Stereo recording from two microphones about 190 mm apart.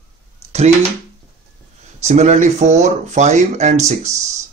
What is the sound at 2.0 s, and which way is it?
Speech, 35° right (ahead or behind).